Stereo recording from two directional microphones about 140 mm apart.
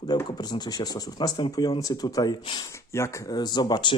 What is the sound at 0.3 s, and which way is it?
Speech, 30° left (ahead or behind).